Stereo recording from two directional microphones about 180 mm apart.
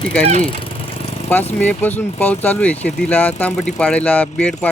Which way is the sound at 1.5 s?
10° left (ahead or behind).